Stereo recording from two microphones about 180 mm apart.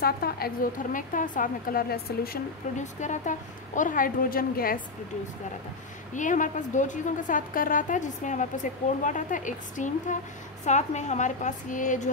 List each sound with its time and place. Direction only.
0.0 s a woman's voice: 55° left (ahead or behind)
2.8 s a woman's voice: 40° left (ahead or behind)
6.1 s a woman's voice: 45° left (ahead or behind)